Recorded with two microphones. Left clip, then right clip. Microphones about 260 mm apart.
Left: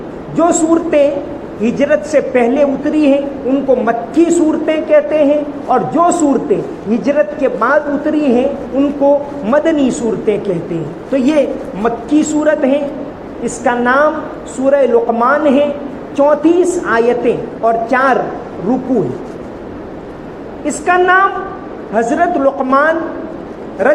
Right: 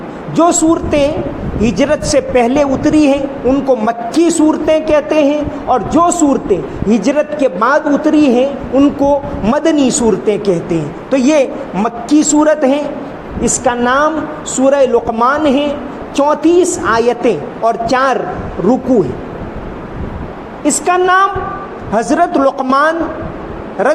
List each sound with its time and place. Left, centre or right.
0.3 s a man's voice: right
20.7 s a man's voice: right